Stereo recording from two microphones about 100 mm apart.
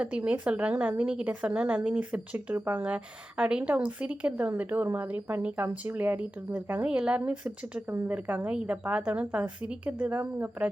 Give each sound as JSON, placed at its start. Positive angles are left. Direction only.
{"t": 0.0, "sound": "speech", "side_deg": -15}